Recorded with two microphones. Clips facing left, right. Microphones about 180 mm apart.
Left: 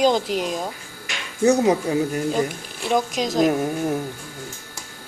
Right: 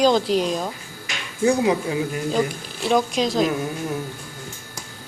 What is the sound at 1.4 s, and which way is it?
Speech, 40° left (ahead or behind).